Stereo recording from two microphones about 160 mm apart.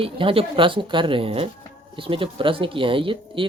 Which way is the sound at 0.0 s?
35° right (ahead or behind).